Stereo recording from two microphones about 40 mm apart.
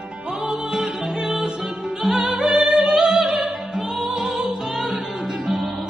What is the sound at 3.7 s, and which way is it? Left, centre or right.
Opera, centre.